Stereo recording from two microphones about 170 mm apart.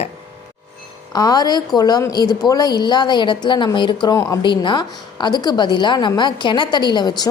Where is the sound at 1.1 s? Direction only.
25° left (ahead or behind).